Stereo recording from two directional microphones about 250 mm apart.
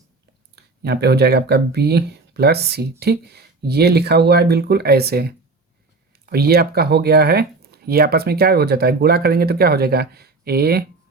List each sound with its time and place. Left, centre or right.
0.5 s speech: right